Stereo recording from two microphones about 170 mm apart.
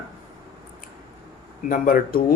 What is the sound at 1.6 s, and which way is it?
Speech, 55° left (ahead or behind).